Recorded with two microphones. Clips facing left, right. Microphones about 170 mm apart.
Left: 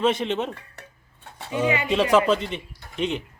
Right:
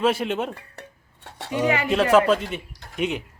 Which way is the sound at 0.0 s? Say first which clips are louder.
Even; 5° right (ahead or behind).